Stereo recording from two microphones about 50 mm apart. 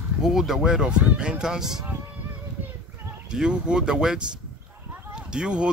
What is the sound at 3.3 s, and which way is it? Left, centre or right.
A man's voice, centre.